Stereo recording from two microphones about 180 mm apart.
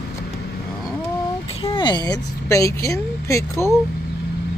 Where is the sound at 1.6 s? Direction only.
25° left (ahead or behind).